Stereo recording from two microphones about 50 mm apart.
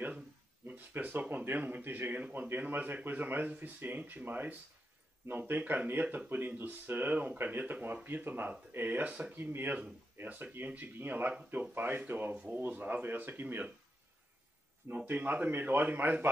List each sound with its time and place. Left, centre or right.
0.7 s a sound: right
1.3 s speech: right
9.4 s speech: right
10.2 s speech: right
15.0 s speech: right